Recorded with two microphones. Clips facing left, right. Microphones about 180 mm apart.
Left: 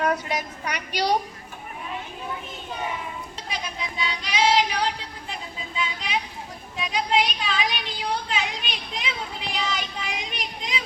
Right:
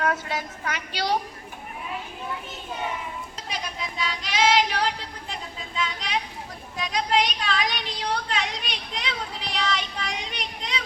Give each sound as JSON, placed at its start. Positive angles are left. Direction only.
{"t": 0.0, "sound": "a woman's voice", "side_deg": 15}
{"t": 3.5, "sound": "female singing", "side_deg": 0}
{"t": 5.3, "sound": "a sound", "side_deg": 5}